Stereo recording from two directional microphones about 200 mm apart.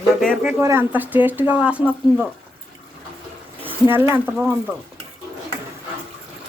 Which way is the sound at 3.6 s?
10° right (ahead or behind).